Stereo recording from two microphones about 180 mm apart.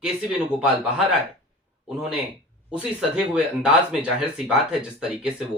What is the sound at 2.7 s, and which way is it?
Speech, 5° right (ahead or behind).